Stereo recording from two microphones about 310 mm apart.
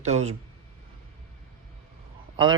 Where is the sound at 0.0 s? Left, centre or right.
Right.